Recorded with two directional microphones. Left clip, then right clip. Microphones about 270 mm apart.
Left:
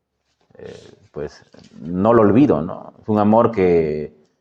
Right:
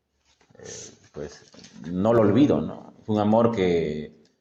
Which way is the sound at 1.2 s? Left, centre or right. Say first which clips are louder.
Left 8 dB; left.